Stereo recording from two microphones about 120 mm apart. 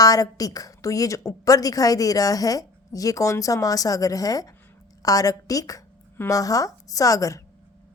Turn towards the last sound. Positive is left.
turn(degrees=30)  # may be behind; listen again after turning